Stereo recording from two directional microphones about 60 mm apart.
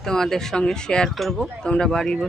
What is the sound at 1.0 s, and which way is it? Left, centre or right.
Speech, centre.